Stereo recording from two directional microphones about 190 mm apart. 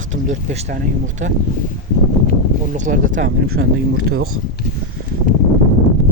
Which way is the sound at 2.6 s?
40° right (ahead or behind).